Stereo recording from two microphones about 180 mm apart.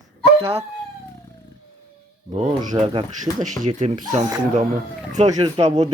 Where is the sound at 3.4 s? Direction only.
45° right (ahead or behind).